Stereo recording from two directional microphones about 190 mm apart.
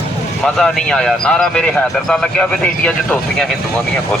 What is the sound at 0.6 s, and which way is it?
Speech, 5° left (ahead or behind).